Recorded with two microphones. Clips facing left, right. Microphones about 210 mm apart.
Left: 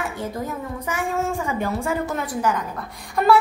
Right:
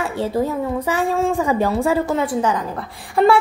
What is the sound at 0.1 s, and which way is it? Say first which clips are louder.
Speech: right 8 dB; 30° right (ahead or behind).